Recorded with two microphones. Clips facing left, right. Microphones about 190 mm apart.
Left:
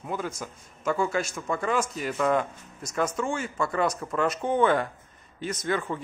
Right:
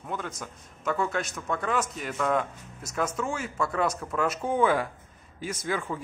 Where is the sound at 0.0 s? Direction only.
5° left (ahead or behind).